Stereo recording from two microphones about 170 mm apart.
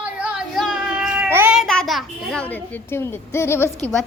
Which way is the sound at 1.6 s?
Centre (ahead or behind).